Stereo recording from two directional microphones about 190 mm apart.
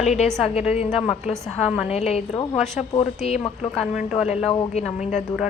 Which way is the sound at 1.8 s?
35° left (ahead or behind).